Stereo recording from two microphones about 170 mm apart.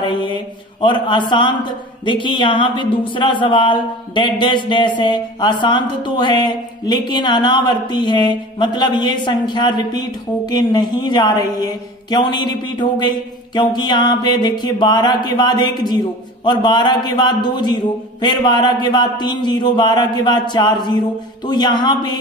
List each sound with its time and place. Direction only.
0.0 s speech: 30° left (ahead or behind)